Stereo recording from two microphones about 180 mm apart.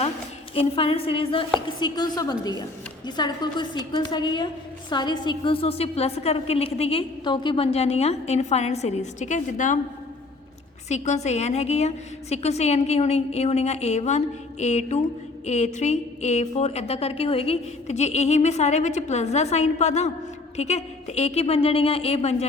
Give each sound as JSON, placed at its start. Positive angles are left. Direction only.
{"t": 0.5, "sound": "a woman's voice", "side_deg": 30}
{"t": 10.8, "sound": "a woman's voice", "side_deg": 40}